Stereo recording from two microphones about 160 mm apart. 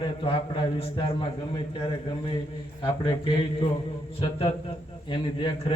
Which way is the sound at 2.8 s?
35° left (ahead or behind).